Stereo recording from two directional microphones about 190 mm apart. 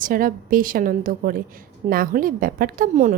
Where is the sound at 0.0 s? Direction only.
50° right (ahead or behind).